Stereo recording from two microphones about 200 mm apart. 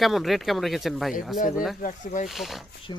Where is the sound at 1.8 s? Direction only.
40° left (ahead or behind).